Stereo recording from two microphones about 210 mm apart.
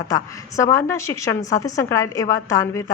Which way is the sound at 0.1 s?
15° left (ahead or behind).